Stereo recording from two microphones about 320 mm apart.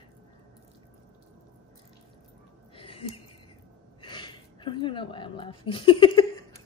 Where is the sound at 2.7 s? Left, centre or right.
Centre.